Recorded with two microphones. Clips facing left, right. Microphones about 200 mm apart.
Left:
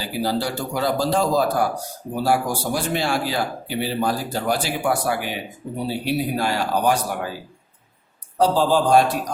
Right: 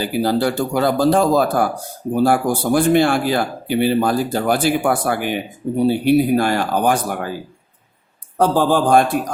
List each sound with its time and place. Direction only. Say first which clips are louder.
0.0 s speech: right 6 dB; 55° right (ahead or behind)
8.4 s speech: right 2 dB; 55° right (ahead or behind)